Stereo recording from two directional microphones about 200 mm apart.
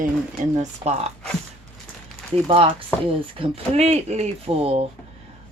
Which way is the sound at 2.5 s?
25° right (ahead or behind).